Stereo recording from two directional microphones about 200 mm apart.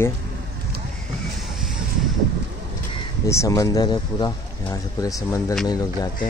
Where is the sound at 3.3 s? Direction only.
15° left (ahead or behind).